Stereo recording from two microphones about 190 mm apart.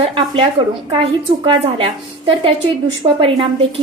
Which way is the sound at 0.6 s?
25° right (ahead or behind).